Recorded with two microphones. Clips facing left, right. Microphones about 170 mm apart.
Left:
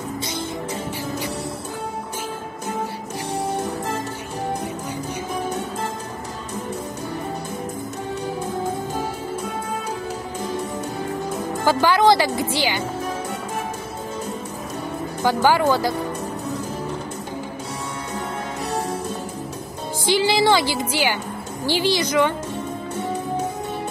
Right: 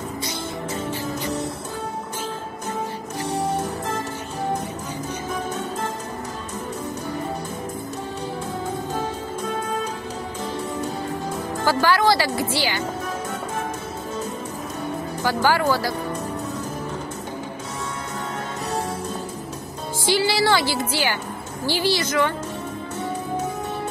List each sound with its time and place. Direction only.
11.6 s speech: 20° left (ahead or behind)
15.2 s speech: 20° left (ahead or behind)
20.1 s speech: 20° left (ahead or behind)